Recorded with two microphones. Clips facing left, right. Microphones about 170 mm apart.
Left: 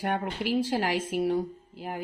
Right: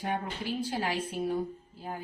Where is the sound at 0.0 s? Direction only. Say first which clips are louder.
Left 4 dB; 80° left.